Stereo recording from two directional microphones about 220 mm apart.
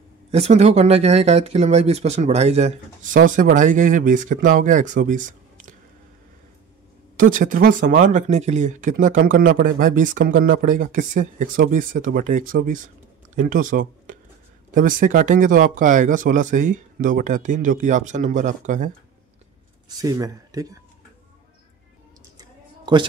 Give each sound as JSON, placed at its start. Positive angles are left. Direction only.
{"t": 0.3, "sound": "speech", "side_deg": -30}
{"t": 7.2, "sound": "speech", "side_deg": -40}
{"t": 20.0, "sound": "speech", "side_deg": -15}
{"t": 22.4, "sound": "a sound", "side_deg": -20}